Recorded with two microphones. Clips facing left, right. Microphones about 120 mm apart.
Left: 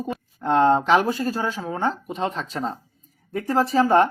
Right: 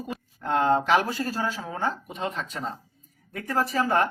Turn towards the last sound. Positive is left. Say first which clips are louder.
# left 6 dB
turn(degrees=30)  # may be behind; listen again after turning